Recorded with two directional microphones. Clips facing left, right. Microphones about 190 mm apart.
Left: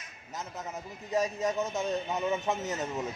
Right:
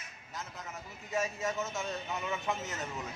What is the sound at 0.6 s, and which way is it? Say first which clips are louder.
Speech: left 6 dB; 35° left (ahead or behind).